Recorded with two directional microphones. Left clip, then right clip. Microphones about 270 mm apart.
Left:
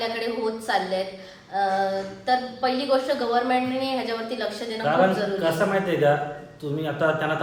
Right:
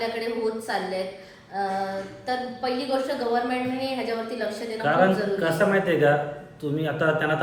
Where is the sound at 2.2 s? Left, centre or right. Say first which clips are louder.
Left 5 dB; centre.